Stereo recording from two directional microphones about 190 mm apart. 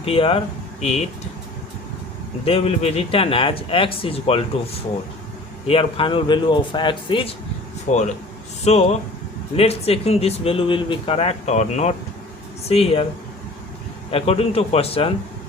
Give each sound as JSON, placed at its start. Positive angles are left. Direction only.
{"t": 0.0, "sound": "speech", "side_deg": 30}
{"t": 2.4, "sound": "speech", "side_deg": 30}
{"t": 5.6, "sound": "speech", "side_deg": 30}
{"t": 7.9, "sound": "speech", "side_deg": 40}
{"t": 14.1, "sound": "speech", "side_deg": 30}